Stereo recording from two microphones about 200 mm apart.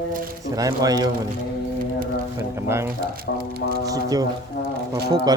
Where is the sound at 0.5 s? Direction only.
20° right (ahead or behind).